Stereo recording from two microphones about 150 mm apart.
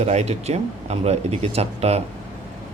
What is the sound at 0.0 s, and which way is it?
Speech, 45° right (ahead or behind).